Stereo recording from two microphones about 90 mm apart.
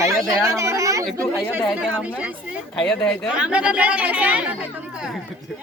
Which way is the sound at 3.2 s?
10° right (ahead or behind).